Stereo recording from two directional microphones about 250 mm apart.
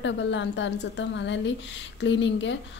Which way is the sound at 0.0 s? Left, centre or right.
Left.